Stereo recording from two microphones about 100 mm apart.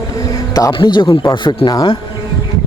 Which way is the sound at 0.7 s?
55° left (ahead or behind).